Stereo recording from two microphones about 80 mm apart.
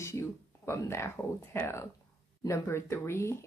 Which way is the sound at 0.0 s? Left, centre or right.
Left.